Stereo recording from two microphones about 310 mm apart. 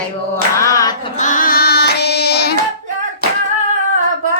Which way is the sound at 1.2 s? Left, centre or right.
Left.